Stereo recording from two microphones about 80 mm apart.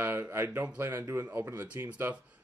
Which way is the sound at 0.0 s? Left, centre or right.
Right.